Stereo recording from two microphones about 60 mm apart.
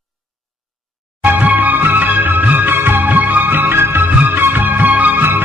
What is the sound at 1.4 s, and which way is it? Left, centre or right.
Music, right.